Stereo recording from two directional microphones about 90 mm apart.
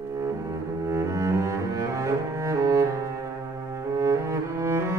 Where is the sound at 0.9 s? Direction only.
35° right (ahead or behind).